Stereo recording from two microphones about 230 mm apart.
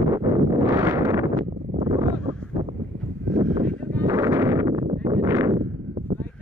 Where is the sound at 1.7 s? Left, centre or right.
Right.